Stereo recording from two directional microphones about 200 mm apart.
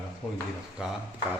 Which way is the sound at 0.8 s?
5° right (ahead or behind).